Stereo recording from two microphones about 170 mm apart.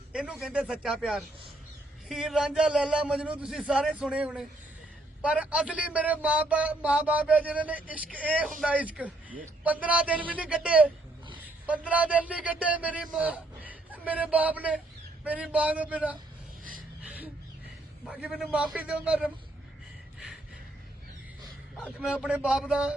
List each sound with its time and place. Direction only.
0.1 s a man's voice: 5° right (ahead or behind)
18.1 s a man's voice: 5° right (ahead or behind)
21.9 s a man's voice: 5° right (ahead or behind)